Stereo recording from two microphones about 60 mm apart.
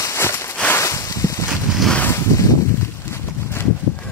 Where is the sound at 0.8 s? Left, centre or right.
Left.